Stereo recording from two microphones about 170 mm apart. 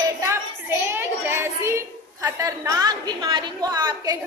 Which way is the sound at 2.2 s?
20° right (ahead or behind).